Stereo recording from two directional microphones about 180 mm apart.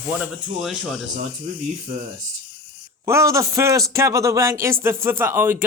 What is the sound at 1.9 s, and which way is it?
Speech, 50° right (ahead or behind).